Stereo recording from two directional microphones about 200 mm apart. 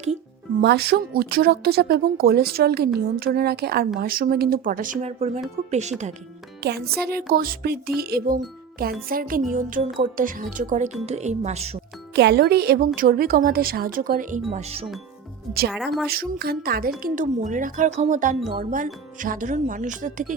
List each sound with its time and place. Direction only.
0.0 s music: 35° right (ahead or behind)
0.6 s a woman's voice: 55° right (ahead or behind); by 5.4 s 35° right (ahead or behind)
6.6 s a woman's voice: 50° right (ahead or behind); by 11.8 s 30° right (ahead or behind)
12.1 s a woman's voice: 55° right (ahead or behind); by 14.8 s 30° right (ahead or behind)
15.7 s a woman's voice: centre (ahead or behind)
16.0 s a woman's voice: 50° right (ahead or behind)